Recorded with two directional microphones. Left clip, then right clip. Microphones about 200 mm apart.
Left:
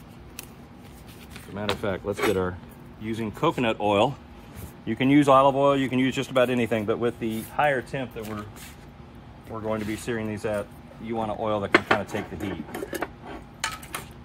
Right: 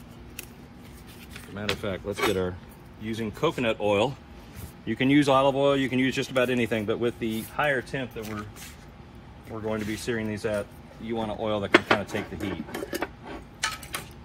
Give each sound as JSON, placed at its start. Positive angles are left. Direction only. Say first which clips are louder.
{"t": 1.7, "sound": "speech", "louder": "left 2 dB", "side_deg": 30}
{"t": 3.8, "sound": "speech", "louder": "left 3 dB", "side_deg": 45}
{"t": 4.8, "sound": "speech", "louder": "left 2 dB", "side_deg": 30}
{"t": 8.2, "sound": "speech", "louder": "left 1 dB", "side_deg": 15}
{"t": 9.5, "sound": "speech", "louder": "left 2 dB", "side_deg": 25}
{"t": 11.7, "sound": "speech", "louder": "right 1 dB", "side_deg": 10}
{"t": 12.7, "sound": "a sound", "louder": "even", "side_deg": 10}